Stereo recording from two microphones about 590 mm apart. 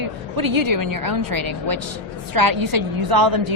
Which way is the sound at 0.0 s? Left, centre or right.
Right.